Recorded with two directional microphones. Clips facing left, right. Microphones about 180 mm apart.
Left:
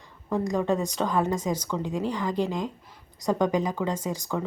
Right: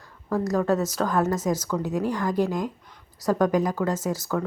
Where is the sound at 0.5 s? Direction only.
5° right (ahead or behind).